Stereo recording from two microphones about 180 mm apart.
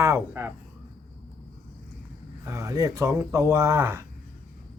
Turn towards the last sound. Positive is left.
turn(degrees=-15)  # may be behind; listen again after turning